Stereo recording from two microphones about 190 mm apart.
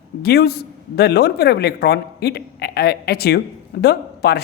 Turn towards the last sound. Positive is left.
turn(degrees=55)  # may be behind; listen again after turning